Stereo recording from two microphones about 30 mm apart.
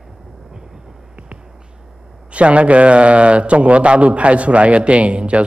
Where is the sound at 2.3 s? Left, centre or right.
Right.